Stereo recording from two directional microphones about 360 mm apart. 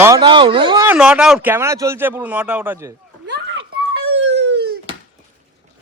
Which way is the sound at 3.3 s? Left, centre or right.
Right.